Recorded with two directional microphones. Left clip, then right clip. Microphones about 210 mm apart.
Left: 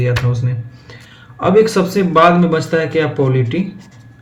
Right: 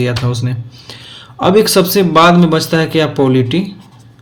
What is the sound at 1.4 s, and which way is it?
Speech, 50° right (ahead or behind).